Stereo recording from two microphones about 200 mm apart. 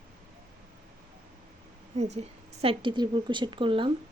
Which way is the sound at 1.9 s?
35° right (ahead or behind).